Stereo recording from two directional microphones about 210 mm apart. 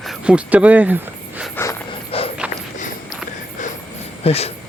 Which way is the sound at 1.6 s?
10° left (ahead or behind).